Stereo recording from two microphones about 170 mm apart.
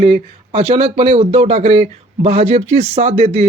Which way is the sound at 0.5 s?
35° right (ahead or behind).